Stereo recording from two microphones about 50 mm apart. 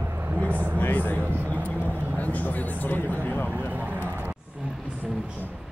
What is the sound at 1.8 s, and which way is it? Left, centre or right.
Vehicle, right.